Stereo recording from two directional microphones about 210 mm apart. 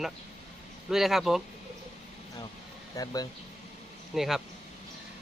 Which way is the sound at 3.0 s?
15° left (ahead or behind).